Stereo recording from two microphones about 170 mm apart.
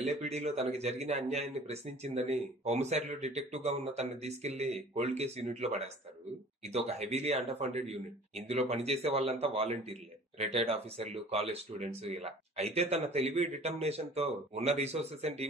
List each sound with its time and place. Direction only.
0.0 s speech: 40° right (ahead or behind)